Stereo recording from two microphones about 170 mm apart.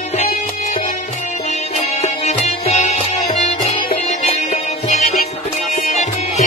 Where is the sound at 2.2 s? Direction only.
40° left (ahead or behind).